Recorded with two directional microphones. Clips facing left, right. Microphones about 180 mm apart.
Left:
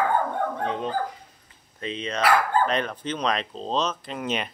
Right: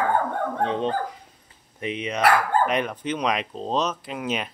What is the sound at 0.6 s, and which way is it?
Speech, 30° right (ahead or behind).